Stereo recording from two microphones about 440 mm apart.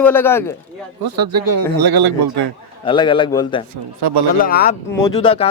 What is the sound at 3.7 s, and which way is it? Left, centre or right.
Speech, right.